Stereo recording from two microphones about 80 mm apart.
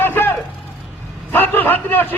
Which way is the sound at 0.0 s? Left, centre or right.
Left.